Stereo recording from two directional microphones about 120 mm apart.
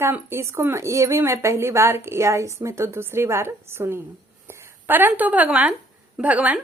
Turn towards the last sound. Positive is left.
turn(degrees=-10)  # may be behind; listen again after turning